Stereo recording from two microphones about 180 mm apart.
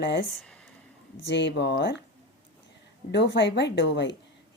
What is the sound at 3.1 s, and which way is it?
Speech, 75° left (ahead or behind).